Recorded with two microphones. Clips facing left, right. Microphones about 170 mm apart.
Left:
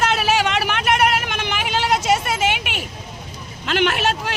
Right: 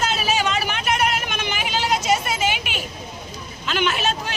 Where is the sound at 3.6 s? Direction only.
65° left (ahead or behind).